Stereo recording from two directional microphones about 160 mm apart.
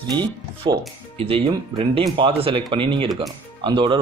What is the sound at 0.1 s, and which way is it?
Speech, 25° right (ahead or behind).